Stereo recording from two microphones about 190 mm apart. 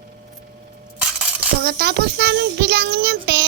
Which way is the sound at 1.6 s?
60° right (ahead or behind).